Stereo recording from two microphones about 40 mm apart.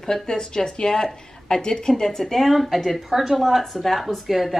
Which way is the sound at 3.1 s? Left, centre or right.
Centre.